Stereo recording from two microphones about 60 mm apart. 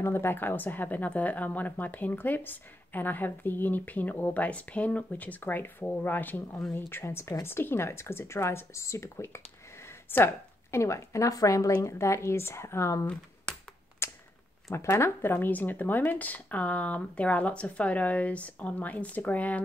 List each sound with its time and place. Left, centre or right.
0.0 s a woman's voice: left
14.0 s mechanisms: left
14.7 s speech: left